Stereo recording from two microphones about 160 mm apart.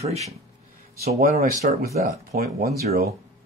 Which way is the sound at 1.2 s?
65° right (ahead or behind).